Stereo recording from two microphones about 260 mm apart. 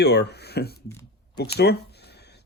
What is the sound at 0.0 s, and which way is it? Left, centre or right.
Speech, left.